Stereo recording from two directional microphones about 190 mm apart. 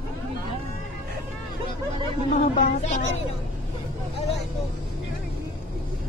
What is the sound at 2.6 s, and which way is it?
Speech, 40° left (ahead or behind).